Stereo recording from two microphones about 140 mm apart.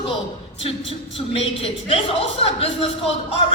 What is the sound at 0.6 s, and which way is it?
A woman's voice, 40° left (ahead or behind).